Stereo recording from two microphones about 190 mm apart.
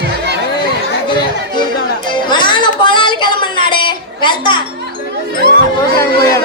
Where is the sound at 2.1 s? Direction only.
25° left (ahead or behind).